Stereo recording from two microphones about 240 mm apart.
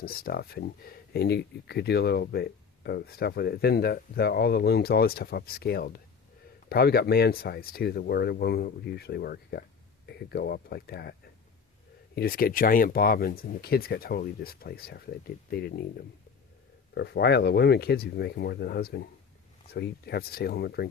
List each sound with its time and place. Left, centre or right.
0.0 s speech: left
12.1 s speech: left